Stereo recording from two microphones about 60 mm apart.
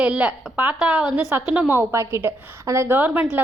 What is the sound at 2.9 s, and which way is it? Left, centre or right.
Speech, right.